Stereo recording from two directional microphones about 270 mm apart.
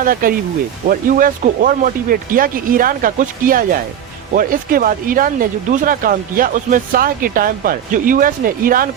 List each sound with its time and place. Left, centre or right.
0.0 s speech: right